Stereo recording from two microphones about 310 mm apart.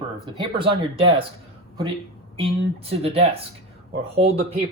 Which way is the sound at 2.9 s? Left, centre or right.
Centre.